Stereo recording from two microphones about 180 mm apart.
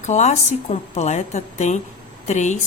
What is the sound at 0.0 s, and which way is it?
A woman's voice, 40° left (ahead or behind).